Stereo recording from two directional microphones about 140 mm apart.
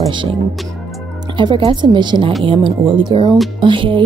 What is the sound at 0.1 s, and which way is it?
Speech, 35° right (ahead or behind).